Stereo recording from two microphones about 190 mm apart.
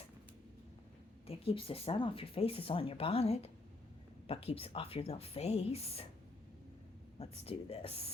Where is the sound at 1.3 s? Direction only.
30° left (ahead or behind).